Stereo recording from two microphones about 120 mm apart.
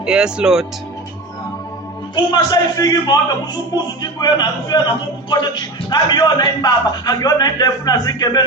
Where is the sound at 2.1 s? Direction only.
35° left (ahead or behind).